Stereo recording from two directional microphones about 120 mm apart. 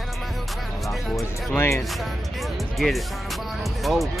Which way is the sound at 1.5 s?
20° left (ahead or behind).